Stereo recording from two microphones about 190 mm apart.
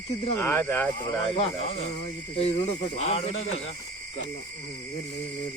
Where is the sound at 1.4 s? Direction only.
30° left (ahead or behind).